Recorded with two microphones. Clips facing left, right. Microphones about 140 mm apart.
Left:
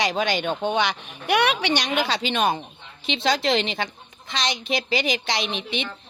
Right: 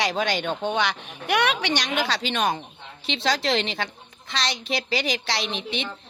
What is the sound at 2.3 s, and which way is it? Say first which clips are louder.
Speech: left 2 dB; 25° left (ahead or behind).